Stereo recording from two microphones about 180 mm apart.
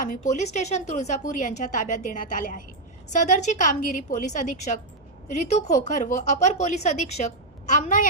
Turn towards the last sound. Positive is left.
turn(degrees=40)  # may be behind; listen again after turning